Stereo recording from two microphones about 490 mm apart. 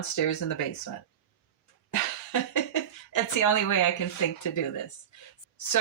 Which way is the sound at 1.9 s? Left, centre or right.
Left.